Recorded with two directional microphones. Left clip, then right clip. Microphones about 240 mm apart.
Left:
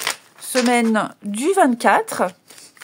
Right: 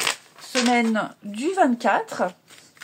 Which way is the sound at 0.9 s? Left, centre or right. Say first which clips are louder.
Left 5 dB; left.